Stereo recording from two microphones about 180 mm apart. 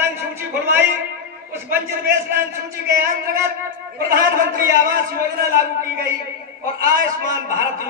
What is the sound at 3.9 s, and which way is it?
Speech, 55° right (ahead or behind).